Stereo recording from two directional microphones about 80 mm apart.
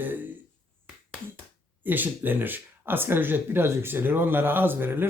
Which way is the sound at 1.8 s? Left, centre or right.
Right.